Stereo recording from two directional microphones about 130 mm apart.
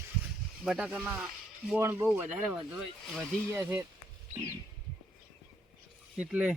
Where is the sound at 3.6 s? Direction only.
15° right (ahead or behind).